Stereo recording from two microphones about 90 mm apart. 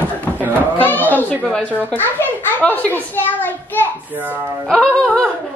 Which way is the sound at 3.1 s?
20° left (ahead or behind).